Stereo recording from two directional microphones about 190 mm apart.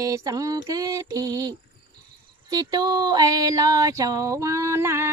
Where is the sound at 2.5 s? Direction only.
20° right (ahead or behind).